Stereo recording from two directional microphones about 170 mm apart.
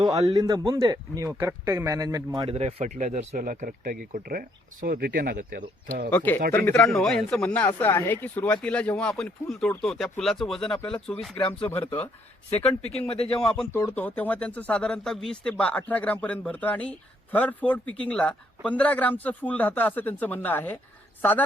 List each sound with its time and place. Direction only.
0.0 s a man's voice: 25° right (ahead or behind)
2.5 s speech: 35° right (ahead or behind); by 6.1 s 55° right (ahead or behind)
6.1 s a man's voice: 10° left (ahead or behind)
11.3 s speech: 30° left (ahead or behind)
13.7 s a man's voice: 15° left (ahead or behind)